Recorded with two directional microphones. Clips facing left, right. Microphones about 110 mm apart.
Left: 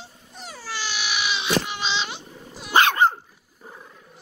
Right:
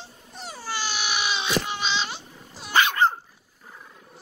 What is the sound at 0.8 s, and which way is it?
Baby cry, 45° right (ahead or behind).